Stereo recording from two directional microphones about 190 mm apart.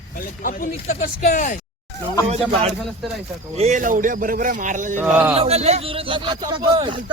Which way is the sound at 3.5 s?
35° right (ahead or behind).